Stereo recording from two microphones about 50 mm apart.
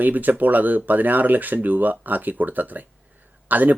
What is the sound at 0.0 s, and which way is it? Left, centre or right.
Speech, right.